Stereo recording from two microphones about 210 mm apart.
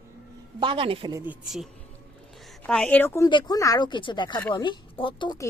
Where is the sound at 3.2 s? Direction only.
20° left (ahead or behind).